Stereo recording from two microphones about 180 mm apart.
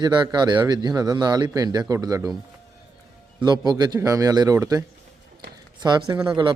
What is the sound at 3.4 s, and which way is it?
Speech, 25° right (ahead or behind).